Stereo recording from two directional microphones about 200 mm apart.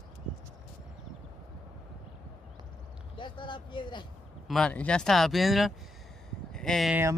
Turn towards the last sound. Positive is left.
turn(degrees=0)  # may be behind; listen again after turning